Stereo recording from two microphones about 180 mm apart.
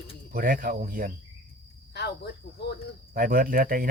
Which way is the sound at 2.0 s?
65° left (ahead or behind).